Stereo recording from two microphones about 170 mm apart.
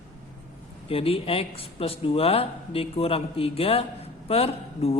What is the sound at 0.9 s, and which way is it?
A man's voice, 35° left (ahead or behind).